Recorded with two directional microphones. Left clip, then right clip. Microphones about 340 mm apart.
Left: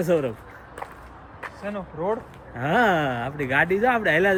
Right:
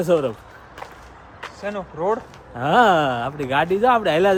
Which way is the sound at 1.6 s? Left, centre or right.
Right.